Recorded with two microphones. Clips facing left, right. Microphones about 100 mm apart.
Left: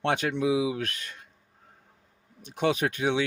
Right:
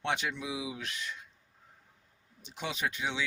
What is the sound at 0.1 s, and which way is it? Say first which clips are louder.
Speech: left 9 dB; 60° left (ahead or behind).